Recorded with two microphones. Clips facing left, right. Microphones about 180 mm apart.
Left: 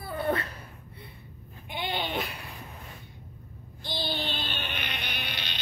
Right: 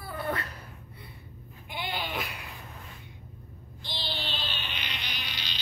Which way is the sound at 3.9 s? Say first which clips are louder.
Left 5 dB; 45° left (ahead or behind).